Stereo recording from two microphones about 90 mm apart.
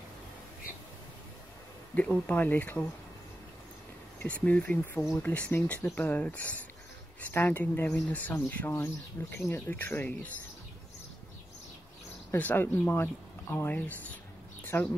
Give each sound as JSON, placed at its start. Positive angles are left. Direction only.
{"t": 2.0, "sound": "speech", "side_deg": 15}
{"t": 4.2, "sound": "speech", "side_deg": 15}
{"t": 12.3, "sound": "speech", "side_deg": 20}
{"t": 14.6, "sound": "a sound", "side_deg": 20}